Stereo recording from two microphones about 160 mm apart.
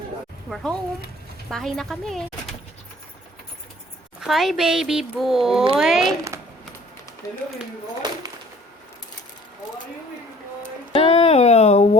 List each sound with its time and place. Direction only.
0.5 s speech: 5° left (ahead or behind)
4.2 s speech: centre (ahead or behind)
7.2 s speech: 20° left (ahead or behind)
10.9 s a sound: 40° left (ahead or behind)